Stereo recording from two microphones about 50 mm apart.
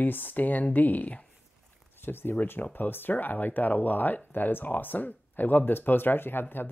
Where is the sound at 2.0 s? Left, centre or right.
Left.